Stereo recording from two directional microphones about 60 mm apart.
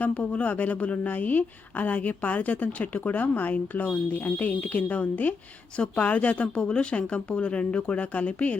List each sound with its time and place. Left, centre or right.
0.0 s a woman's voice: left
5.7 s a woman's voice: centre